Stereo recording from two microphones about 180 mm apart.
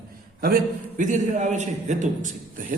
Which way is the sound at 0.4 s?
50° right (ahead or behind).